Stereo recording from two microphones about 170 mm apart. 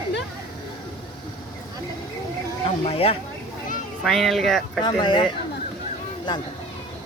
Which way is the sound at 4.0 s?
Centre (ahead or behind).